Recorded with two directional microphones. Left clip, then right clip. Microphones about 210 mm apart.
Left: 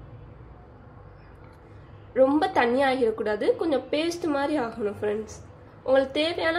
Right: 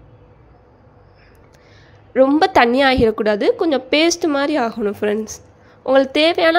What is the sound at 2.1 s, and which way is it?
A woman's voice, 40° right (ahead or behind).